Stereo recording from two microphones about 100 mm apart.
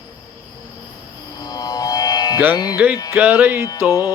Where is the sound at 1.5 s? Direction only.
40° left (ahead or behind).